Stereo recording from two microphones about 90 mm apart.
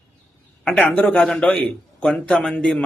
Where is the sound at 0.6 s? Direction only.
10° left (ahead or behind).